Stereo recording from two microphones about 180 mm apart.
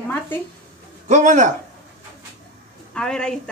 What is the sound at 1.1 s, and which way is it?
Speech, 40° right (ahead or behind).